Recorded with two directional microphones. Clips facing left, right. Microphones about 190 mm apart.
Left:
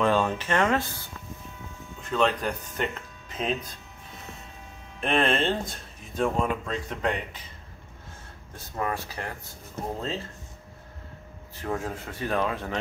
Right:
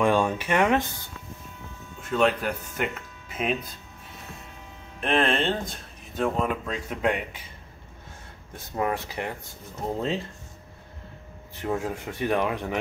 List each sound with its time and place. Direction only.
0.0 s speech: 10° right (ahead or behind)
2.0 s speech: 5° right (ahead or behind)
5.0 s speech: centre (ahead or behind)
8.7 s speech: 20° right (ahead or behind)
11.5 s speech: 20° right (ahead or behind)